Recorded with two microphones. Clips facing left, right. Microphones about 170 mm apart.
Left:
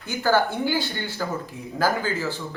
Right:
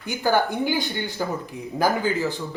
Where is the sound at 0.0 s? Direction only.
15° right (ahead or behind).